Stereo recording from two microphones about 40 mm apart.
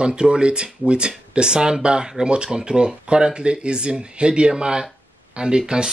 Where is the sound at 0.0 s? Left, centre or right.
Right.